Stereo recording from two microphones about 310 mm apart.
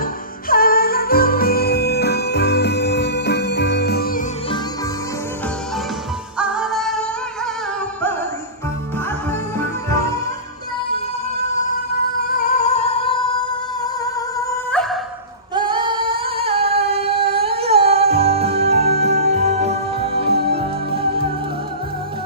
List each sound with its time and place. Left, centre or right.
0.0 s music: left
6.3 s music: centre
12.5 s music: left; by 14.9 s centre
15.5 s female singing: centre
16.9 s singing: centre
17.3 s music: centre